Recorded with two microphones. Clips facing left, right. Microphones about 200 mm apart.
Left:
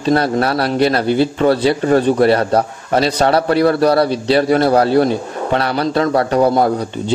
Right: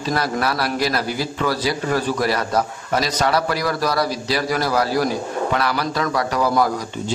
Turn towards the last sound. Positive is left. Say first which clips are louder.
# left 6 dB
turn(degrees=30)  # may be behind; listen again after turning